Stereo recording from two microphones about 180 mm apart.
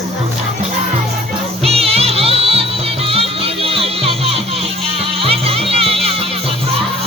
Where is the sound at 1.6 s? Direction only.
35° right (ahead or behind).